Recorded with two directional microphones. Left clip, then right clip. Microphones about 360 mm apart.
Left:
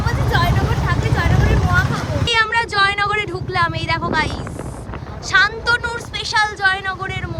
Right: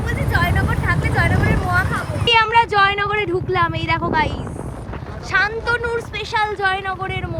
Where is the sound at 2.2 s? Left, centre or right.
Centre.